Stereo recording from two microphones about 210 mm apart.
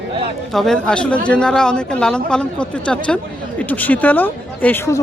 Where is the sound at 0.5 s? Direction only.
Centre (ahead or behind).